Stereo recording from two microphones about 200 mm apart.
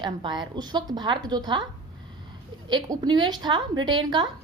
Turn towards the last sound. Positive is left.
turn(degrees=-20)  # may be behind; listen again after turning